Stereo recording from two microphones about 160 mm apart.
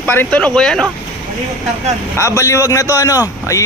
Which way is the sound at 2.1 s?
15° left (ahead or behind).